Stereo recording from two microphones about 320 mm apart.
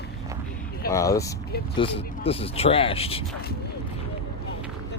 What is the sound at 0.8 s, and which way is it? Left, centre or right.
Speech, centre.